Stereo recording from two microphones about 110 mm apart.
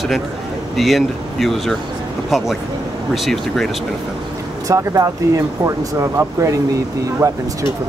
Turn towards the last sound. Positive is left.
turn(degrees=-35)  # may be behind; listen again after turning